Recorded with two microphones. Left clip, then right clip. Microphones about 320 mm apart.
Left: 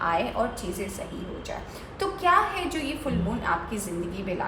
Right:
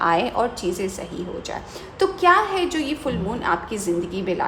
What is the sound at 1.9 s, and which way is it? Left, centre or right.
A woman's voice, right.